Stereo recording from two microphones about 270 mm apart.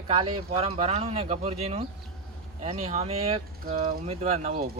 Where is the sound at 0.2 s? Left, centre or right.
Right.